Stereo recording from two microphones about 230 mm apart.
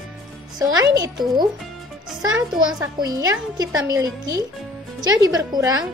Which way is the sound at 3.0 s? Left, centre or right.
Centre.